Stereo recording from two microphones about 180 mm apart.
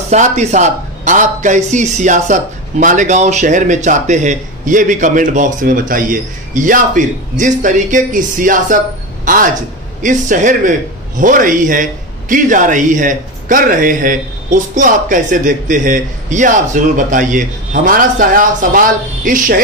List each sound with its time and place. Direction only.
0.1 s speech: 40° right (ahead or behind)